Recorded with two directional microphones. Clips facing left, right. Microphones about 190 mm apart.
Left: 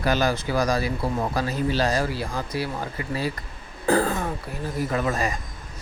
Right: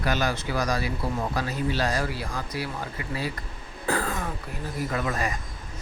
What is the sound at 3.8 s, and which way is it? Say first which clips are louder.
Speech: left 6 dB; 35° left (ahead or behind).